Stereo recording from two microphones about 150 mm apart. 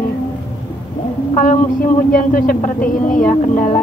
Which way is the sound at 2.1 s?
70° left (ahead or behind).